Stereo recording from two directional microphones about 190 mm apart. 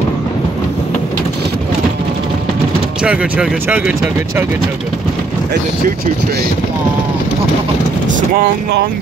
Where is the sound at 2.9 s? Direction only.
5° right (ahead or behind).